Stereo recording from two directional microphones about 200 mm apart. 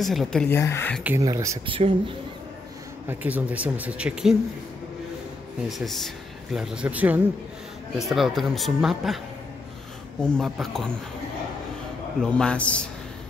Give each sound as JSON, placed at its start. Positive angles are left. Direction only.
{"t": 0.0, "sound": "speech", "side_deg": 0}
{"t": 1.0, "sound": "speech", "side_deg": -15}
{"t": 1.8, "sound": "speech", "side_deg": -25}
{"t": 3.1, "sound": "speech", "side_deg": -10}
{"t": 5.7, "sound": "speech", "side_deg": 0}
{"t": 10.2, "sound": "speech", "side_deg": 5}
{"t": 12.2, "sound": "speech", "side_deg": 5}